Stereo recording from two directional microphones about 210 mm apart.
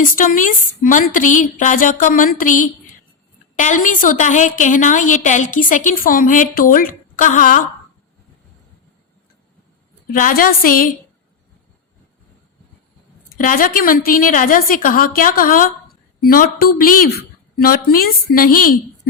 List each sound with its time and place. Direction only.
0.0 s a woman's voice: 40° left (ahead or behind)
10.1 s a woman's voice: 40° left (ahead or behind)
13.4 s a woman's voice: 40° left (ahead or behind)